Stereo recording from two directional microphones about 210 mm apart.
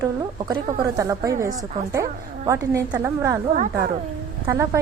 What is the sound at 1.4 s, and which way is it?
Speech, 40° right (ahead or behind).